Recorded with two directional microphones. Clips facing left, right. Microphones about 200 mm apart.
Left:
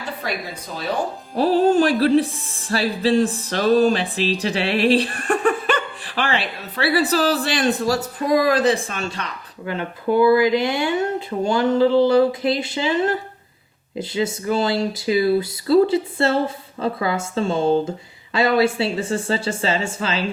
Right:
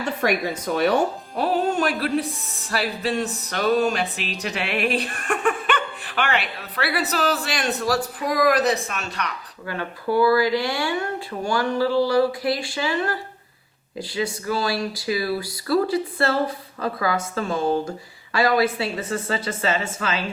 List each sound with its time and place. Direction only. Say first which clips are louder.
0.2 s speech: right 6 dB; 75° right (ahead or behind)
1.4 s music: left 6 dB; 35° left (ahead or behind)